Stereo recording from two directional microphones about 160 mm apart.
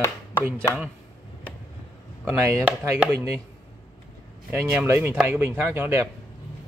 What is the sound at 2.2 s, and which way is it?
Speech, 15° right (ahead or behind).